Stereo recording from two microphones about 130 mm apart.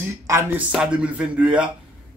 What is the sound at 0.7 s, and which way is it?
Speech, 10° right (ahead or behind).